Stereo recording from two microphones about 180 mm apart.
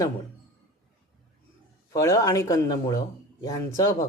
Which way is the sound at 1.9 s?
15° left (ahead or behind).